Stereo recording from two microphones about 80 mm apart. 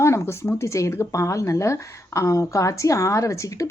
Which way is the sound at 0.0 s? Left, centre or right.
Left.